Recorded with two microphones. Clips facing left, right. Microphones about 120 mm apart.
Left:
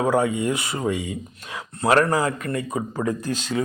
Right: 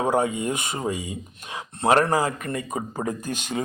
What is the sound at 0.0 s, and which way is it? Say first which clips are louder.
Speech: left 2 dB; 20° right (ahead or behind).